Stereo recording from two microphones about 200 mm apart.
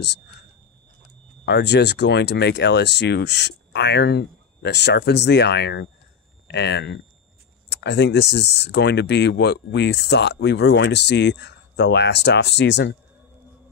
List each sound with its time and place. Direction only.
1.4 s speech: 60° left (ahead or behind)